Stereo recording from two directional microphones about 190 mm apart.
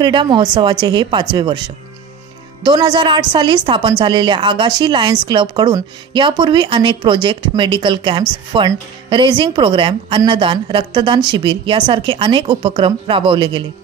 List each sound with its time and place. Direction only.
0.0 s a woman's voice: 25° right (ahead or behind)
2.6 s a woman's voice: 25° right (ahead or behind)